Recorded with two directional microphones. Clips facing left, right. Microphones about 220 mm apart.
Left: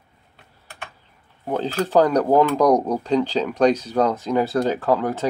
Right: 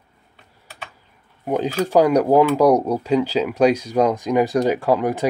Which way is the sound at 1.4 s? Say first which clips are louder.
Right 2 dB; 15° right (ahead or behind).